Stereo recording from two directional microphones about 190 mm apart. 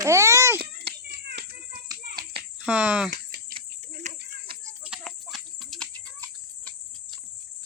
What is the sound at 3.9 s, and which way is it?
Cricket, 40° right (ahead or behind).